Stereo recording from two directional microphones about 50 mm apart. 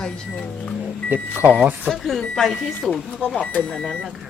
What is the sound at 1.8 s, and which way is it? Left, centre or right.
Speech, centre.